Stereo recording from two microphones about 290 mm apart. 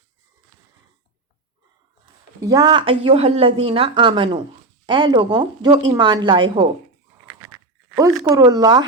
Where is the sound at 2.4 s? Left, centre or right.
Centre.